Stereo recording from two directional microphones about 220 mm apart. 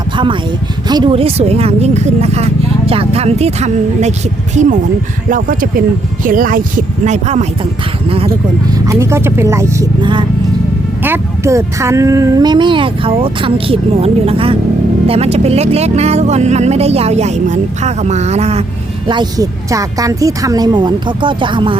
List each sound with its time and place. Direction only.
0.9 s speech: 20° right (ahead or behind)
8.7 s speech: 15° right (ahead or behind)